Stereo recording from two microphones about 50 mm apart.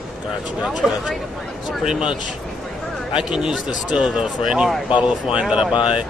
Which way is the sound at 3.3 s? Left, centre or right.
Centre.